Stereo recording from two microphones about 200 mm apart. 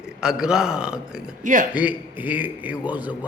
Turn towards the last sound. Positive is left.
turn(degrees=-5)  # may be behind; listen again after turning